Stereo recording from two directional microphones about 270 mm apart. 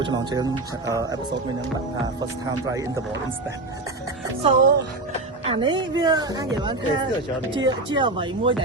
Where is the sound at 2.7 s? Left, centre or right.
Centre.